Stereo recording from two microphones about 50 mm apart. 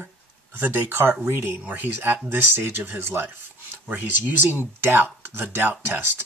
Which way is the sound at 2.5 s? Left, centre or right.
Right.